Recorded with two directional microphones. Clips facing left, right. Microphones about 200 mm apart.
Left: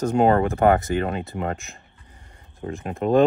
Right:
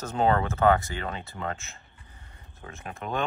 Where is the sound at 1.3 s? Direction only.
15° left (ahead or behind).